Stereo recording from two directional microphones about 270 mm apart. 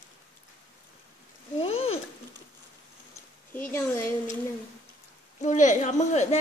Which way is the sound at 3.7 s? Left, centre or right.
Centre.